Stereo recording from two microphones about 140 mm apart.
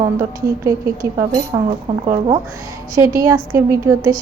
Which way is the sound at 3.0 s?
25° right (ahead or behind).